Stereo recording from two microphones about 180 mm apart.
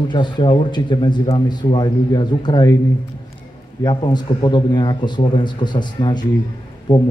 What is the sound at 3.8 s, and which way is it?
Speech, 25° left (ahead or behind).